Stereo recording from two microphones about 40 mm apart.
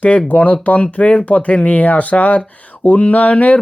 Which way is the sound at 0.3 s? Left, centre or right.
Left.